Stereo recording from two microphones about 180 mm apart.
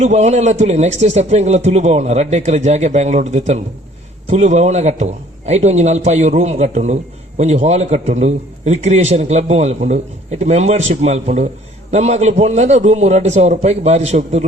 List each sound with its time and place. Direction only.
0.0 s a man's voice: 40° right (ahead or behind)